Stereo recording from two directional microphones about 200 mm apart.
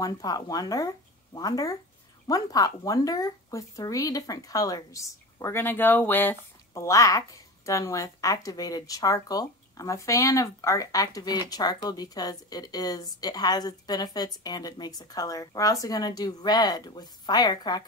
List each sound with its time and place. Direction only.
0.0 s speech: 20° left (ahead or behind)